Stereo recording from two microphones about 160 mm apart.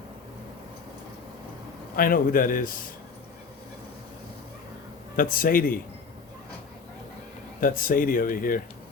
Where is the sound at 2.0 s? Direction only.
60° left (ahead or behind).